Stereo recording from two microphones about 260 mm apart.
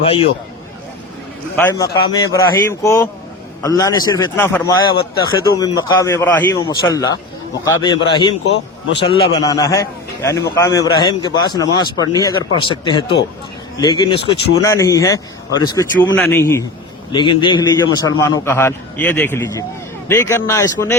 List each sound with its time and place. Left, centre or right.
0.0 s a man's voice: left
1.5 s a man's voice: centre
8.5 s speech: left
9.3 s a man's voice: centre